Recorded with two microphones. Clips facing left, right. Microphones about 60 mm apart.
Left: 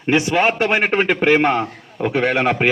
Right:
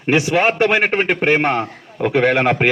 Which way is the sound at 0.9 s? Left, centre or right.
Centre.